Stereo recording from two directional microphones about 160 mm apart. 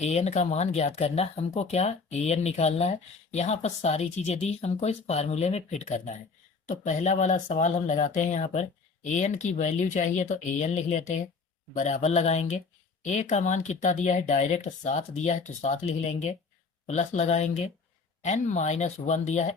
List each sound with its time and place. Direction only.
0.0 s speech: 45° left (ahead or behind)